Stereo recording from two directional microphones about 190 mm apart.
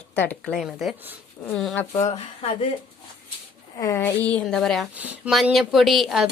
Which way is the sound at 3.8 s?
15° left (ahead or behind).